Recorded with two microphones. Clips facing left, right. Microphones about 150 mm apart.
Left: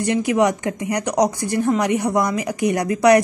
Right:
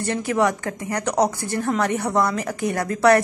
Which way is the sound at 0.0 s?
15° left (ahead or behind).